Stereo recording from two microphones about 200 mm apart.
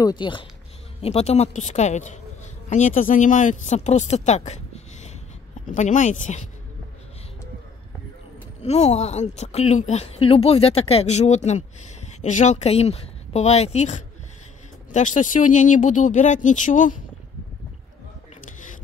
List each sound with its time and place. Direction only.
0.0 s speech: 25° left (ahead or behind)
4.5 s a sound: 35° left (ahead or behind)
5.7 s speech: 40° left (ahead or behind)
8.6 s speech: 30° left (ahead or behind)